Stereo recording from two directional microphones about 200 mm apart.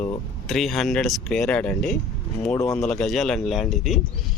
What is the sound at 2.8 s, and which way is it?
Speech, centre (ahead or behind).